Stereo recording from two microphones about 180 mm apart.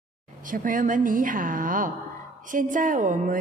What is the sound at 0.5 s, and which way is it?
A woman's voice, 50° right (ahead or behind).